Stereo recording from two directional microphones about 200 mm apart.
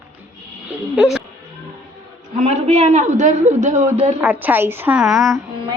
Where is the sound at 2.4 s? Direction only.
30° right (ahead or behind).